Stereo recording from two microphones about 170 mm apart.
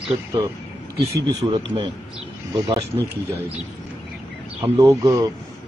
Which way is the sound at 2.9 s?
20° right (ahead or behind).